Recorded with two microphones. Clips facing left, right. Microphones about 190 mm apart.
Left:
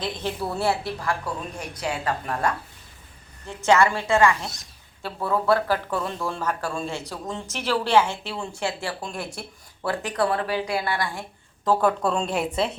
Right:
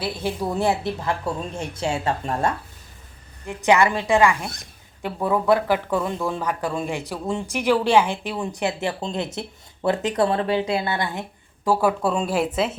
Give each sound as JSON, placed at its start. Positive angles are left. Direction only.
{"t": 0.0, "sound": "a woman's voice", "side_deg": -10}
{"t": 4.4, "sound": "speech", "side_deg": -55}
{"t": 5.0, "sound": "a woman's voice", "side_deg": -15}